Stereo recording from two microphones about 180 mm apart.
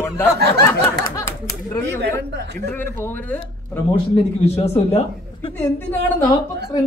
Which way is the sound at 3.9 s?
35° left (ahead or behind).